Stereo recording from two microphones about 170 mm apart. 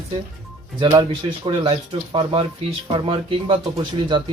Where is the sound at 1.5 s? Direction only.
30° right (ahead or behind).